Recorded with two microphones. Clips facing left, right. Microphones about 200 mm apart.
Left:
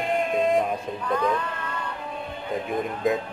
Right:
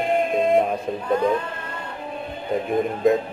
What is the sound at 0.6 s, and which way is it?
Speech, 25° right (ahead or behind).